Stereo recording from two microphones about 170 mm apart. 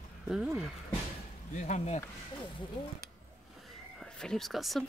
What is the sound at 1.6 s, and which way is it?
Speech, 40° left (ahead or behind).